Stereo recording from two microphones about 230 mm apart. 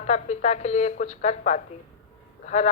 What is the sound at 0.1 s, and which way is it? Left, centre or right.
A woman's voice, left.